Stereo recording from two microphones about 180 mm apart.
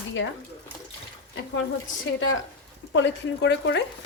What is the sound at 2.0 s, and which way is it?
Speech, 90° left.